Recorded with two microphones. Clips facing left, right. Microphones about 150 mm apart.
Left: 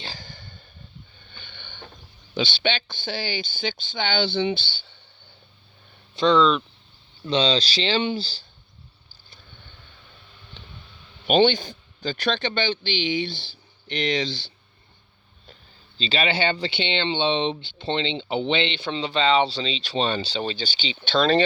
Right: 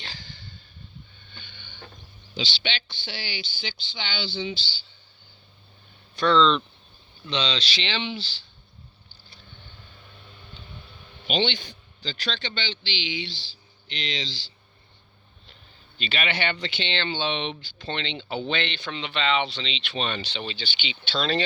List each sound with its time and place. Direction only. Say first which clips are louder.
0.2 s a sound: left 2 dB; 50° left (ahead or behind)
2.3 s a man's voice: left 7 dB; 55° left (ahead or behind)
6.1 s speech: left 2 dB; 15° left (ahead or behind)
7.3 s speech: left 7 dB; 35° left (ahead or behind)
11.3 s a man's voice: left 8 dB; 50° left (ahead or behind)
16.0 s speech: left 5 dB; 30° left (ahead or behind)
21.0 s a man's voice: left 7 dB; 50° left (ahead or behind)